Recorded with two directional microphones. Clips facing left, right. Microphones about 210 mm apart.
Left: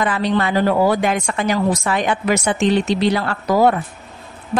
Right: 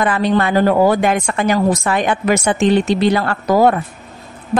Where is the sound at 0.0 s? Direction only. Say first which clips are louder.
Right 3 dB; 50° right (ahead or behind).